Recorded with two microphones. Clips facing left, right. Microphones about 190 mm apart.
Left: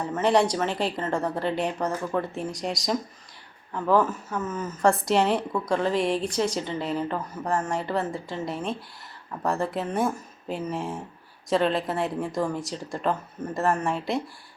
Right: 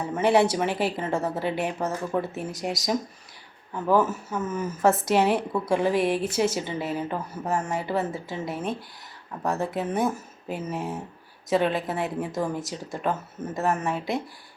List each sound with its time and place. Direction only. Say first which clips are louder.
0.0 s speech: right 1 dB; 5° right (ahead or behind)